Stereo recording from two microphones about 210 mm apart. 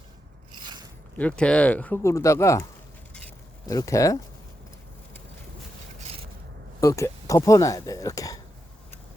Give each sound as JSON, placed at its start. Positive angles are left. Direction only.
{"t": 1.1, "sound": "speech", "side_deg": 5}
{"t": 3.2, "sound": "a sound", "side_deg": 15}
{"t": 6.8, "sound": "speech", "side_deg": 15}